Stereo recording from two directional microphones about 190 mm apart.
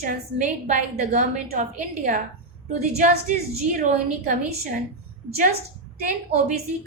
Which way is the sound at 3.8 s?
40° right (ahead or behind).